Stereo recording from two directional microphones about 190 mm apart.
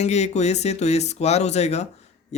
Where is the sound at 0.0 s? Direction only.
35° left (ahead or behind).